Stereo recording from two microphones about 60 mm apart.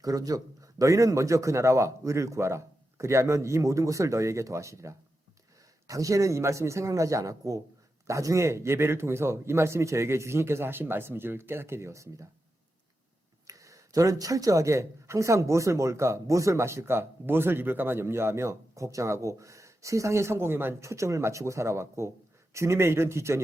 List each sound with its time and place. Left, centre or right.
0.0 s speech: right
5.9 s a man's voice: right
13.5 s speech: right
20.8 s a man's voice: right